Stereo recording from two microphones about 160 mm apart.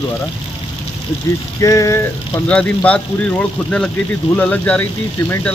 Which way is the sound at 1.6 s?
20° left (ahead or behind).